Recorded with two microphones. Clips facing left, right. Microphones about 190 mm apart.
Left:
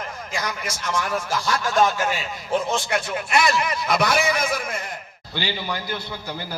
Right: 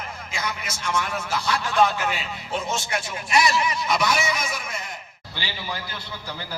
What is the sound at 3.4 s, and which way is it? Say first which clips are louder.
A man's voice: right 1 dB; 60° left (ahead or behind).